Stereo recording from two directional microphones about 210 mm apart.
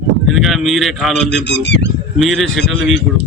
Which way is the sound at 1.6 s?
55° left (ahead or behind).